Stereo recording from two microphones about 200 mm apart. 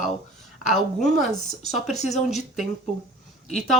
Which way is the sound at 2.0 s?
35° left (ahead or behind).